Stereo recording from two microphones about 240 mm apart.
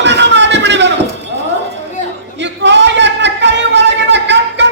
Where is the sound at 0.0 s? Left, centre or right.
Right.